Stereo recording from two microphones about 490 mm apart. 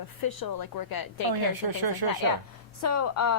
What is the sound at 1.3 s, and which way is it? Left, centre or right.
Speech, right.